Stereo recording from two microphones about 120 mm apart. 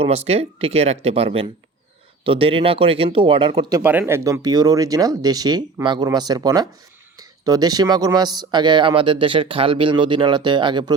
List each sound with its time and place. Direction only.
0.0 s speech: 60° right (ahead or behind)
3.5 s speech: 30° right (ahead or behind)
3.8 s speech: 15° right (ahead or behind); by 10.9 s 40° right (ahead or behind)